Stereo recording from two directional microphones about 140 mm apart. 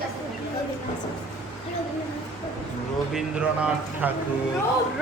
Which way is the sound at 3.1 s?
10° right (ahead or behind).